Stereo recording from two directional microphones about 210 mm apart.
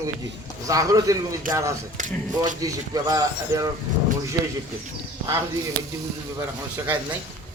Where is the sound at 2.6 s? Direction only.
15° right (ahead or behind).